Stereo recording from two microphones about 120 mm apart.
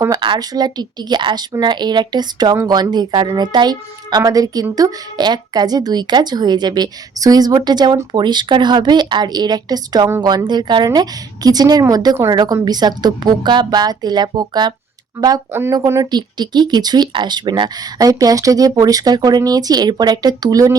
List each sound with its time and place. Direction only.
0.2 s speech: 40° right (ahead or behind)
15.7 s speech: 30° right (ahead or behind)